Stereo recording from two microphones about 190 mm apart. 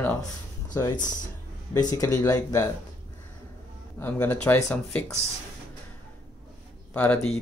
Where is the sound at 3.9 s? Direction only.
10° left (ahead or behind).